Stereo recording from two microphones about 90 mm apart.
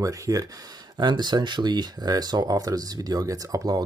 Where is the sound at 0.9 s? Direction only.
50° right (ahead or behind).